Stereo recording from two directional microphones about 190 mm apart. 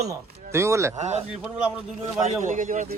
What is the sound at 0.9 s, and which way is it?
Speech, 35° right (ahead or behind).